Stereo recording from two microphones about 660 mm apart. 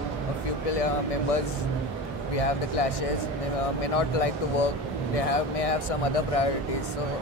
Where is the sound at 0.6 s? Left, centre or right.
Left.